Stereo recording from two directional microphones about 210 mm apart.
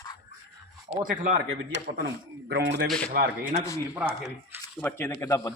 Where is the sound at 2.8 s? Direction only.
5° left (ahead or behind).